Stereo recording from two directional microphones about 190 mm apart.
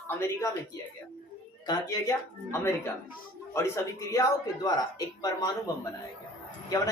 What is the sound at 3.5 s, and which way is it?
A man's voice, 15° left (ahead or behind).